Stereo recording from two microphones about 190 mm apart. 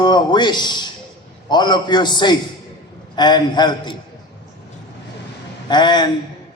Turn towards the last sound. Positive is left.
turn(degrees=25)  # may be behind; listen again after turning